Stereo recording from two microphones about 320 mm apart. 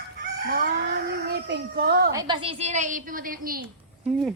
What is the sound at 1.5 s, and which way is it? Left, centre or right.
Speech, right.